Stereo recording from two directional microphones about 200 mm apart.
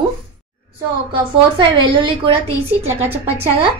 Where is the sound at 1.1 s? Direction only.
25° right (ahead or behind).